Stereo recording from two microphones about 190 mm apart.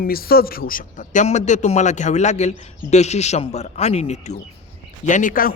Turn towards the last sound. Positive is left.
turn(degrees=45)  # may be behind; listen again after turning